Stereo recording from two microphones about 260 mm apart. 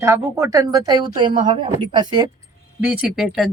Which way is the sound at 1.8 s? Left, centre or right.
Centre.